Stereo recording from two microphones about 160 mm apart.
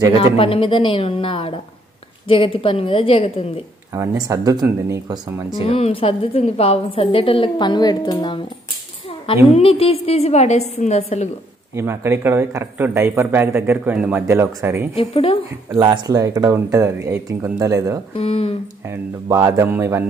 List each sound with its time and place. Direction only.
0.2 s a woman's voice: 35° left (ahead or behind)
3.9 s speech: 20° right (ahead or behind)
5.6 s a woman's voice: 40° left (ahead or behind)
9.5 s a woman's voice: 35° left (ahead or behind)
11.7 s speech: 15° right (ahead or behind)
15.0 s a woman's voice: 35° left (ahead or behind)
15.8 s speech: 25° right (ahead or behind)
18.1 s a woman's voice: 40° left (ahead or behind)
18.9 s speech: 20° right (ahead or behind)